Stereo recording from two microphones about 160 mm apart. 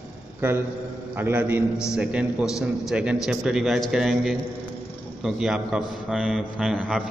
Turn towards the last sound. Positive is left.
turn(degrees=-5)  # may be behind; listen again after turning